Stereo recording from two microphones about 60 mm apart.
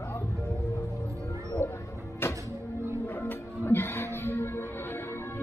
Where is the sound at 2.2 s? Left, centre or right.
Left.